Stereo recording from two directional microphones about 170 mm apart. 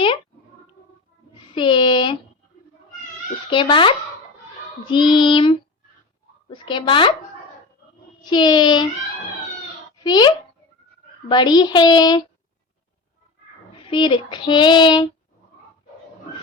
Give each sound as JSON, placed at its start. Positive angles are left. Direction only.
{"t": 1.5, "sound": "child singing", "side_deg": 30}
{"t": 3.5, "sound": "child singing", "side_deg": 30}
{"t": 8.2, "sound": "child singing", "side_deg": 25}
{"t": 10.0, "sound": "child singing", "side_deg": 25}
{"t": 13.7, "sound": "child singing", "side_deg": 30}